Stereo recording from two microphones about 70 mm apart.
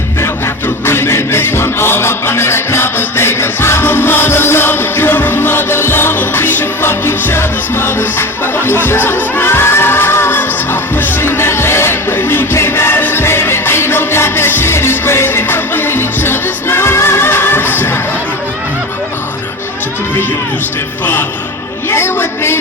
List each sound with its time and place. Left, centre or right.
0.2 s music: left
21.0 s music: left
21.8 s a sound: left